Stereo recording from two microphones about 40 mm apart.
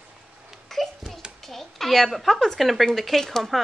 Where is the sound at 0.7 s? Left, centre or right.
Centre.